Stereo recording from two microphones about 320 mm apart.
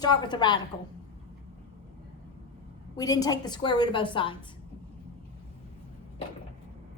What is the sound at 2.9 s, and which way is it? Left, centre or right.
A woman's voice, centre.